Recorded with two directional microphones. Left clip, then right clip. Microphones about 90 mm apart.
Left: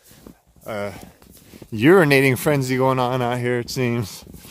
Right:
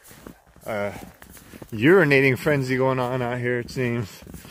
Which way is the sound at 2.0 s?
90° left.